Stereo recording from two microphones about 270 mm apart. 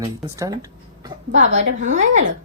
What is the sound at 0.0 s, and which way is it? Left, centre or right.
Speech, centre.